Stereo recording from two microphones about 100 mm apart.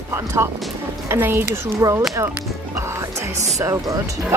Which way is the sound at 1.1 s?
20° right (ahead or behind).